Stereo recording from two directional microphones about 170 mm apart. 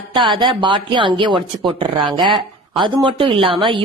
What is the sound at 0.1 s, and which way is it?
A woman's voice, 30° right (ahead or behind).